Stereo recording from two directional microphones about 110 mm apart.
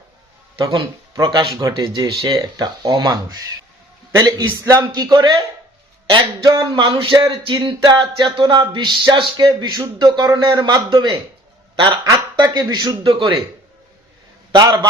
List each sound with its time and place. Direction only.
0.6 s speech: 35° right (ahead or behind)
6.1 s music: 45° right (ahead or behind)
12.0 s speech: 35° right (ahead or behind); by 13.4 s 50° right (ahead or behind)
14.5 s speech: 40° right (ahead or behind)